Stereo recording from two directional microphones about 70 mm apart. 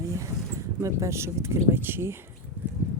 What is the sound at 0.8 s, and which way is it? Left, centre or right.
Speech, right.